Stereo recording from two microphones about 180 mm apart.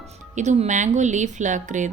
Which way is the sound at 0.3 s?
40° right (ahead or behind).